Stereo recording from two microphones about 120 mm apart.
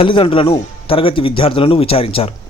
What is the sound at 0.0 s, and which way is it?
Speech, 45° left (ahead or behind).